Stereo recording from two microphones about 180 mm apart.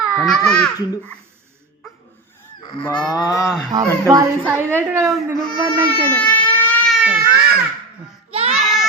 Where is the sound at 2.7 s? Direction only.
25° left (ahead or behind).